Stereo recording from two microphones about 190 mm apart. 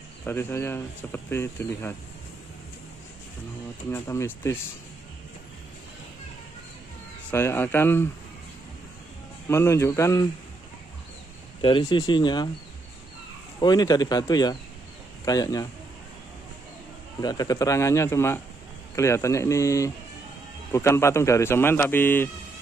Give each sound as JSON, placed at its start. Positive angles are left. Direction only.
{"t": 0.2, "sound": "speech", "side_deg": 10}
{"t": 3.9, "sound": "speech", "side_deg": 15}
{"t": 7.2, "sound": "speech", "side_deg": 10}
{"t": 9.5, "sound": "speech", "side_deg": 15}
{"t": 11.6, "sound": "speech", "side_deg": 25}
{"t": 13.6, "sound": "speech", "side_deg": 20}
{"t": 17.2, "sound": "speech", "side_deg": 20}